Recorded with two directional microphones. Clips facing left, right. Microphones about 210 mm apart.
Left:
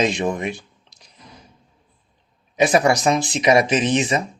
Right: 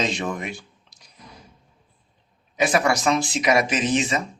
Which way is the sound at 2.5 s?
20° left (ahead or behind).